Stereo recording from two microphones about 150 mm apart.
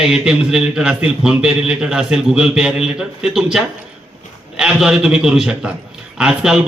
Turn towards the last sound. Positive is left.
turn(degrees=-5)  # may be behind; listen again after turning